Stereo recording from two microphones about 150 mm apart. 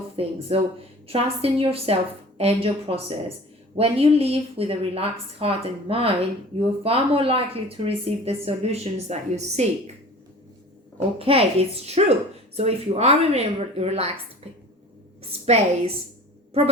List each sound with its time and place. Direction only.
0.2 s a woman's voice: 40° right (ahead or behind)
11.2 s a woman's voice: 40° right (ahead or behind)
15.3 s a woman's voice: 40° right (ahead or behind)